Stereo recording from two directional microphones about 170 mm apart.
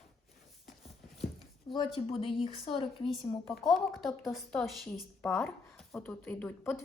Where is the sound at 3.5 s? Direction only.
Centre (ahead or behind).